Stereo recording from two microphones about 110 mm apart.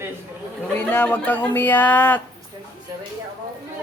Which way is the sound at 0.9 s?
15° left (ahead or behind).